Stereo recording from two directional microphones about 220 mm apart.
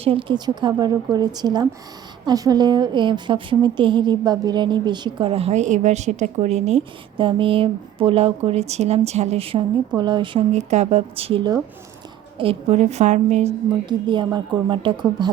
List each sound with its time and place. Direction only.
0.0 s a woman's voice: 25° right (ahead or behind)